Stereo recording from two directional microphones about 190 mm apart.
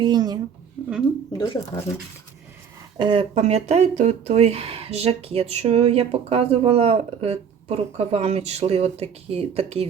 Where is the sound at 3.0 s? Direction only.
25° right (ahead or behind).